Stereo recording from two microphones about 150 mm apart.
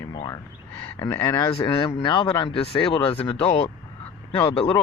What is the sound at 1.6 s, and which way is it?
Speech, 35° left (ahead or behind).